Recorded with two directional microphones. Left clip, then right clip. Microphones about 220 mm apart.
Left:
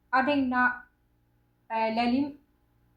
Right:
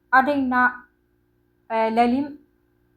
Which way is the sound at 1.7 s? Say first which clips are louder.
Right 8 dB; 35° right (ahead or behind).